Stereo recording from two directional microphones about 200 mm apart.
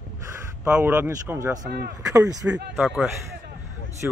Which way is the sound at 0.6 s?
10° right (ahead or behind).